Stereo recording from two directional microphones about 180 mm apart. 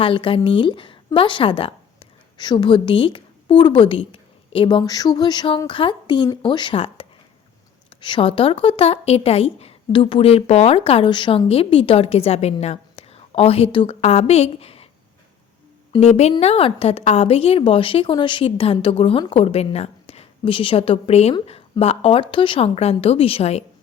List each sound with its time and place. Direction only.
0.0 s a woman's voice: 30° left (ahead or behind)
15.9 s a woman's voice: 35° left (ahead or behind)